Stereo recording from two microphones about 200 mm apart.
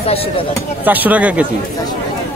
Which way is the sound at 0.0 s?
30° left (ahead or behind).